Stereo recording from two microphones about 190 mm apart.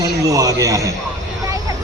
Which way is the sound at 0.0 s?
20° right (ahead or behind).